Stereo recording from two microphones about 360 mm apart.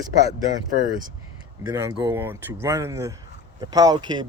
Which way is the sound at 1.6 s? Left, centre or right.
Centre.